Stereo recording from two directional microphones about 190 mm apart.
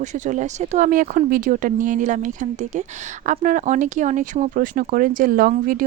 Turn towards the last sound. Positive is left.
turn(degrees=-50)  # may be behind; listen again after turning